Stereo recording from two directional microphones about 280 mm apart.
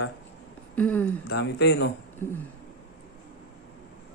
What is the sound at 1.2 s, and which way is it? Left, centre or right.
Speech, left.